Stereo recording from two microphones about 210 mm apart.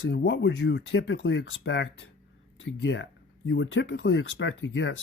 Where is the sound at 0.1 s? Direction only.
55° left (ahead or behind).